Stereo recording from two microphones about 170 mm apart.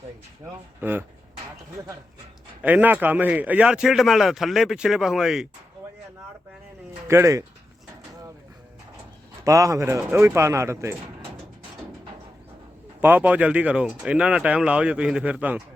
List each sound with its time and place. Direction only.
0.8 s speech: 10° right (ahead or behind)
2.6 s speech: 10° right (ahead or behind)
7.1 s speech: 15° right (ahead or behind)
9.4 s speech: 20° right (ahead or behind)
13.0 s speech: 10° right (ahead or behind)